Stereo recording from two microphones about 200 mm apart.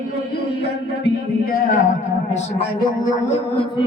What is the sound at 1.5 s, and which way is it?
Music, 45° left (ahead or behind).